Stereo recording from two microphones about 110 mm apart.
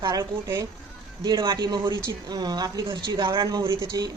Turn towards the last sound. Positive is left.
turn(degrees=-35)  # may be behind; listen again after turning